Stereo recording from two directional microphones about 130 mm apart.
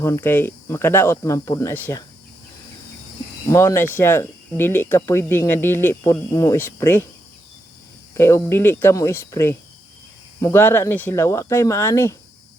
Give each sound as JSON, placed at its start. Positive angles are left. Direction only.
{"t": 0.0, "sound": "speech", "side_deg": 20}
{"t": 3.5, "sound": "speech", "side_deg": 20}
{"t": 8.1, "sound": "speech", "side_deg": 20}